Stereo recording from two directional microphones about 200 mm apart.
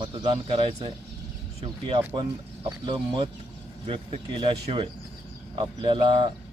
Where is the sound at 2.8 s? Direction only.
25° right (ahead or behind).